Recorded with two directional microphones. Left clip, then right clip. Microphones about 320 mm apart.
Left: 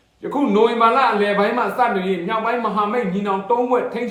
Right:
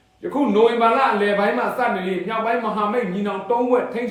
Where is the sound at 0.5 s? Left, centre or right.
Centre.